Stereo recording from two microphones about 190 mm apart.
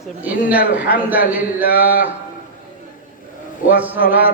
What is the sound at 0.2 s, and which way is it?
A man's voice, 10° right (ahead or behind).